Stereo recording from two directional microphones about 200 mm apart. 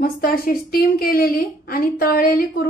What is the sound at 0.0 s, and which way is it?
A woman's voice, 45° left (ahead or behind).